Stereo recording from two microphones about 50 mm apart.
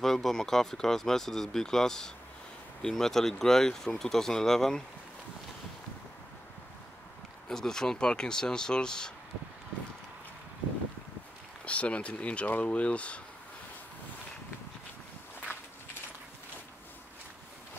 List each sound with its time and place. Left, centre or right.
0.0 s speech: centre
7.4 s speech: centre
11.6 s speech: left